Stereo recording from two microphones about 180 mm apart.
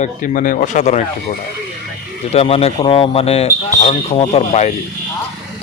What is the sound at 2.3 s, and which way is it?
Speech, 35° left (ahead or behind).